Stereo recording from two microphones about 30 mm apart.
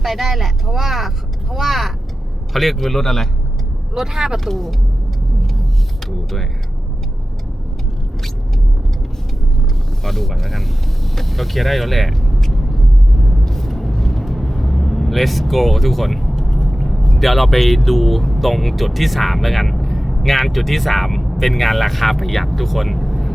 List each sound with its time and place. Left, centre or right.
0.0 s speech: centre
3.9 s speech: centre
4.4 s speech: centre
10.0 s mechanisms: centre
13.4 s vehicle: centre
16.4 s speech: centre